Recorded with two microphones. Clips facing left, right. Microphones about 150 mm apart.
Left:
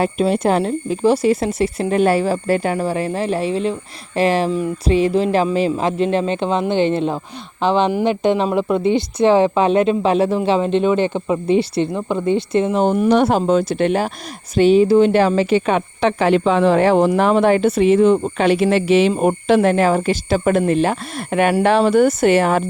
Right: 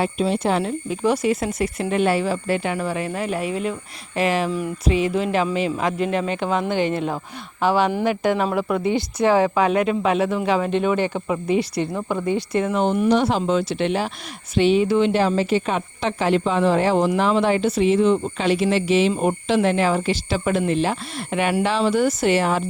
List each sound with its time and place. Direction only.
0.0 s speech: 50° left (ahead or behind)
0.6 s speech: 30° left (ahead or behind)
11.9 s speech: 15° left (ahead or behind)
12.8 s speech: 40° left (ahead or behind)
13.1 s speech: 55° left (ahead or behind); by 15.1 s 40° left (ahead or behind)
15.1 s speech: 65° left (ahead or behind)